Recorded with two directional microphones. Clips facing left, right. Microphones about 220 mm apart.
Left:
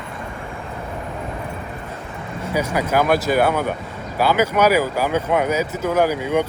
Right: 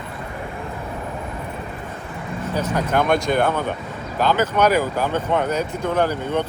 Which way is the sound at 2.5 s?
10° left (ahead or behind).